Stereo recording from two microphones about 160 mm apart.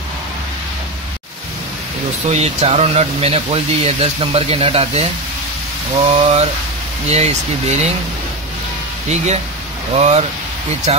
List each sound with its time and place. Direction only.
2.2 s speech: 40° right (ahead or behind)
9.1 s speech: 45° right (ahead or behind)